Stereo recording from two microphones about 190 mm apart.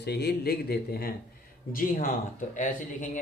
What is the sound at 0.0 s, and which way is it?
Speech, 60° left (ahead or behind).